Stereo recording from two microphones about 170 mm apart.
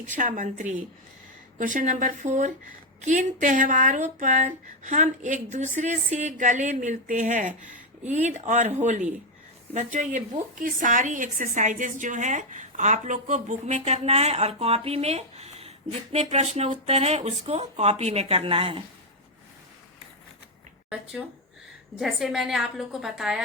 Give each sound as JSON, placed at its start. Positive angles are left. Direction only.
{"t": 0.1, "sound": "a woman's voice", "side_deg": -50}
{"t": 20.9, "sound": "a woman's voice", "side_deg": -5}